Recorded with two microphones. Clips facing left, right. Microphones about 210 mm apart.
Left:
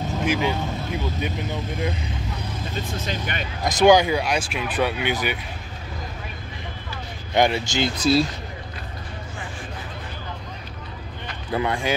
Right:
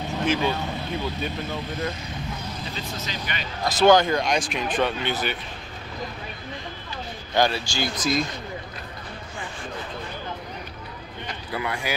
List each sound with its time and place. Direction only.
0.2 s speech: 10° left (ahead or behind)
2.7 s speech: 50° left (ahead or behind)
3.6 s speech: 15° left (ahead or behind)
7.3 s speech: 20° left (ahead or behind)
11.5 s speech: 25° left (ahead or behind)